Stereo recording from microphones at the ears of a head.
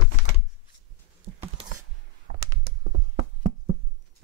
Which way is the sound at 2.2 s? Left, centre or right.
Right.